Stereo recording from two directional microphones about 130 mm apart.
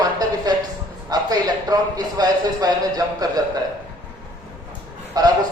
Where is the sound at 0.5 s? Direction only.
30° right (ahead or behind).